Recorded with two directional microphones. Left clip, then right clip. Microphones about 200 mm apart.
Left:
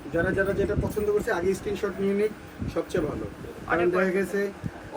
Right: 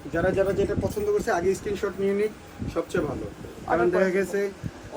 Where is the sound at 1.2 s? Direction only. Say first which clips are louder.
Right 2 dB; 5° right (ahead or behind).